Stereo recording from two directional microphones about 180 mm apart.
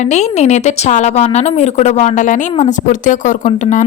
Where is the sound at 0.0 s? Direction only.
40° left (ahead or behind).